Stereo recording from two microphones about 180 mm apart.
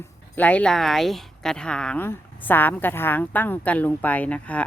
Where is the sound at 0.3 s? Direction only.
5° left (ahead or behind).